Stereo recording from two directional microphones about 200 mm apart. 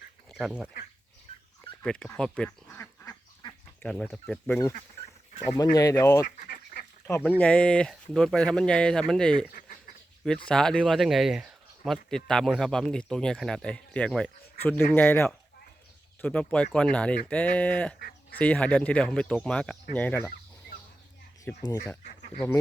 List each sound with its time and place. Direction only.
0.3 s speech: centre (ahead or behind)
1.8 s duck: 5° left (ahead or behind)
3.8 s speech: 5° left (ahead or behind)
5.7 s speech: 15° left (ahead or behind)
6.2 s speech: 40° left (ahead or behind)
7.1 s speech: 10° left (ahead or behind)
9.5 s duck: 45° left (ahead or behind)
10.2 s speech: 5° left (ahead or behind)
21.5 s speech: 10° left (ahead or behind)